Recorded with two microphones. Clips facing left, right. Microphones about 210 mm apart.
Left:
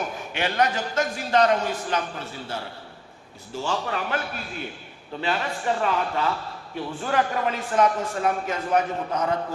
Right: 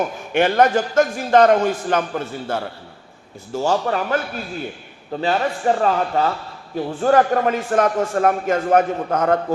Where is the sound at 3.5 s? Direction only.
40° right (ahead or behind).